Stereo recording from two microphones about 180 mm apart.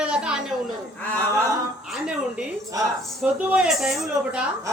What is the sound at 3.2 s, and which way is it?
A woman's voice, 10° right (ahead or behind).